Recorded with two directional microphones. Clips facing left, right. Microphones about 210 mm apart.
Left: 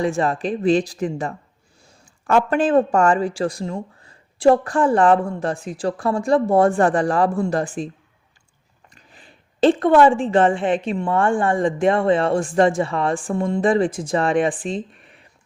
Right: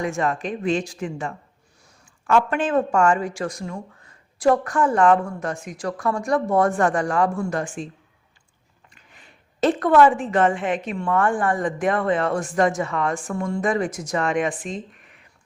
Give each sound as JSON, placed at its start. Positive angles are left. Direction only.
{"t": 0.0, "sound": "speech", "side_deg": 30}
{"t": 9.0, "sound": "a woman's voice", "side_deg": 35}